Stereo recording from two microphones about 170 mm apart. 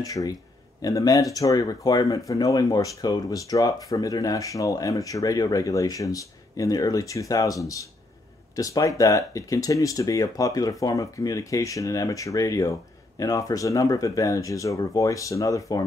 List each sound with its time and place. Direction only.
0.0 s speech: 20° left (ahead or behind)